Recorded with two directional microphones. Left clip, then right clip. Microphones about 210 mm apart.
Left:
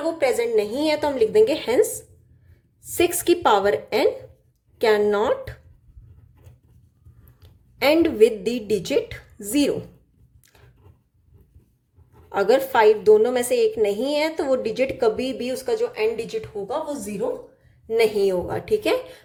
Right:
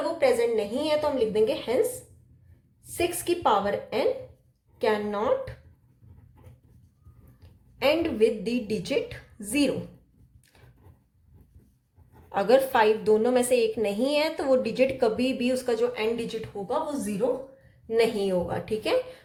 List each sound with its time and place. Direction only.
0.2 s a woman's voice: 30° left (ahead or behind)
2.9 s a woman's voice: 35° left (ahead or behind)
7.8 s a woman's voice: 30° left (ahead or behind)
12.3 s a woman's voice: 20° left (ahead or behind)